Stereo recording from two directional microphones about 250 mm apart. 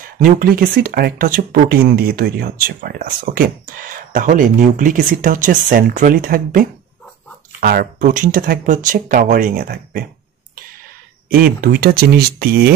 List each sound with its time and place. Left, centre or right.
0.2 s speech: right
11.2 s speech: right